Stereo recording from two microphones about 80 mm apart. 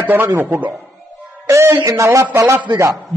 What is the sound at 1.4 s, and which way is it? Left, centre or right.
Speech, right.